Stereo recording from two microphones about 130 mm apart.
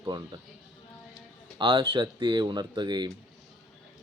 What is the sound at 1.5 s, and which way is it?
Speech, 40° right (ahead or behind).